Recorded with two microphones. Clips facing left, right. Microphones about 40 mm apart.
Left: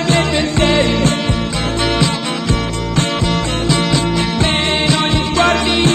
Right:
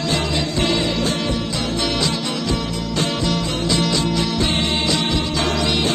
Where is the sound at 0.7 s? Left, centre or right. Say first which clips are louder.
Left 7 dB; left.